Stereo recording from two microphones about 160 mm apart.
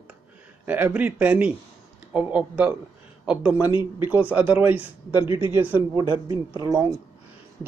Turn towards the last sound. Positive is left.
turn(degrees=-20)  # may be behind; listen again after turning